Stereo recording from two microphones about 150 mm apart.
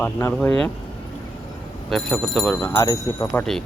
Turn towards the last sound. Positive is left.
turn(degrees=5)  # may be behind; listen again after turning